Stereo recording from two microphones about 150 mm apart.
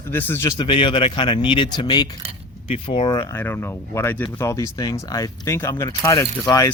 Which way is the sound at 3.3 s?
15° left (ahead or behind).